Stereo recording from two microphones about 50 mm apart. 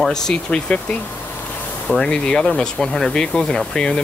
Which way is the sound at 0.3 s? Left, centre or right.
Centre.